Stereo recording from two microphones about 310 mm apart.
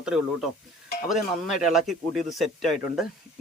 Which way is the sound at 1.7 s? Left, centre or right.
Centre.